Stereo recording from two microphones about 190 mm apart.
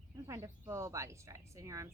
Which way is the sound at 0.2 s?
15° right (ahead or behind).